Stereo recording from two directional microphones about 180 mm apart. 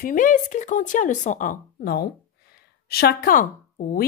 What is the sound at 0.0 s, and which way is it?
A woman's voice, 50° left (ahead or behind).